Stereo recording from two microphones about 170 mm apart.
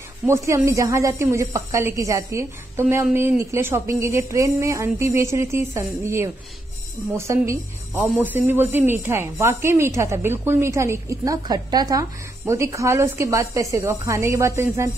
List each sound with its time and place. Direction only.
0.3 s speech: 15° right (ahead or behind)